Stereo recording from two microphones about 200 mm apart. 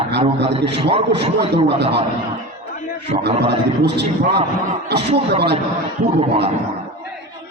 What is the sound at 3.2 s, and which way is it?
A man's voice, 55° right (ahead or behind).